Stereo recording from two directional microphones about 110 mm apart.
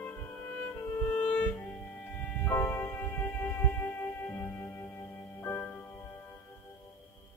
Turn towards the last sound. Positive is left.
turn(degrees=25)  # may be behind; listen again after turning